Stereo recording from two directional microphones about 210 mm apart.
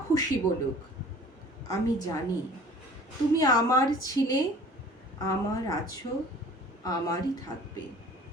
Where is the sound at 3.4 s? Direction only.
15° left (ahead or behind).